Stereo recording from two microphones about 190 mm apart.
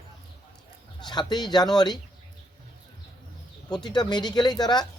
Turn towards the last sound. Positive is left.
turn(degrees=20)  # may be behind; listen again after turning